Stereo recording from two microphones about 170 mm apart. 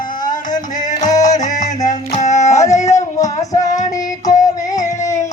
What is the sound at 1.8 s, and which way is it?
Music, 45° left (ahead or behind).